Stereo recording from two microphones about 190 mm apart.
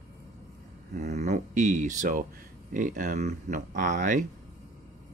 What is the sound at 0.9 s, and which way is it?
Speech, 40° right (ahead or behind).